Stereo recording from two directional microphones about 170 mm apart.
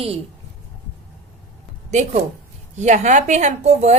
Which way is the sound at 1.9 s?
45° right (ahead or behind).